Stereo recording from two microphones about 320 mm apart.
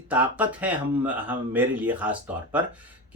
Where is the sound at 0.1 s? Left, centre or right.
Centre.